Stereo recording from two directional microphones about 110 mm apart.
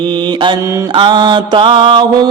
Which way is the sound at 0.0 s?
45° right (ahead or behind).